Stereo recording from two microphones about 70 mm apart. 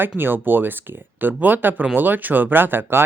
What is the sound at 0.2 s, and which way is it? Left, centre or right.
Speech, right.